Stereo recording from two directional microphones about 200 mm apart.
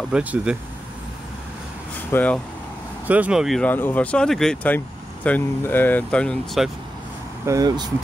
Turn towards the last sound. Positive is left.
turn(degrees=-20)  # may be behind; listen again after turning